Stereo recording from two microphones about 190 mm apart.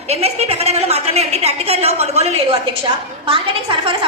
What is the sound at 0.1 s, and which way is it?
A woman's voice, 35° right (ahead or behind).